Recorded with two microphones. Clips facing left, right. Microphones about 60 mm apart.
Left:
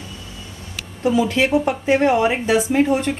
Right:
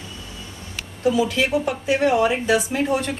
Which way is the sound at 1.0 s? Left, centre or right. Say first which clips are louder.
Left 2 dB; left.